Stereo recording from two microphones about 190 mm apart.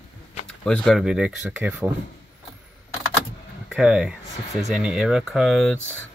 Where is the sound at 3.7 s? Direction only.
5° right (ahead or behind).